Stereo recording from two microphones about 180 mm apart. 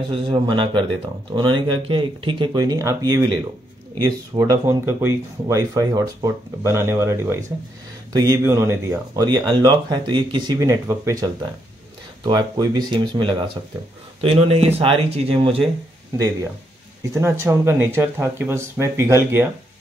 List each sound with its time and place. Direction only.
0.1 s speech: 30° right (ahead or behind)
17.0 s speech: 15° right (ahead or behind)